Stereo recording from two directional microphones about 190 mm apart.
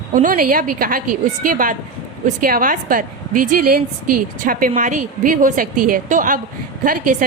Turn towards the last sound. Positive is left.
turn(degrees=-45)  # may be behind; listen again after turning